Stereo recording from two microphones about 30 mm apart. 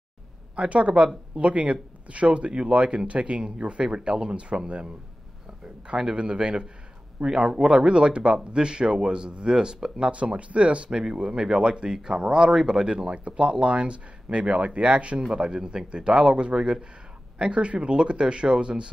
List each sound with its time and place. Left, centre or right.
0.6 s speech: right
6.1 s speech: right
10.1 s speech: right
10.9 s speech: right
15.3 s speech: right